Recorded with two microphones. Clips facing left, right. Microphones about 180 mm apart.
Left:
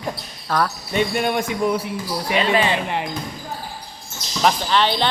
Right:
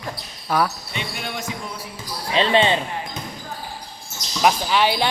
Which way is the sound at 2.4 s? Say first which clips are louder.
Right 2 dB; 25° right (ahead or behind).